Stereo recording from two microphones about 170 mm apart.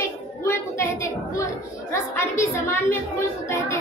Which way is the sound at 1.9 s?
15° left (ahead or behind).